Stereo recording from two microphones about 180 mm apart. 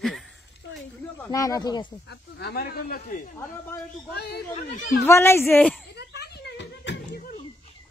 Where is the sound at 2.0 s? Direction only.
70° left (ahead or behind); by 3.3 s 50° left (ahead or behind).